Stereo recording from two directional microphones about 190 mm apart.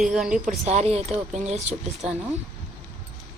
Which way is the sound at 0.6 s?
35° right (ahead or behind).